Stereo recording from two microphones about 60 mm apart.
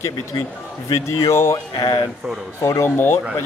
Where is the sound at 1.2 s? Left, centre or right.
Left.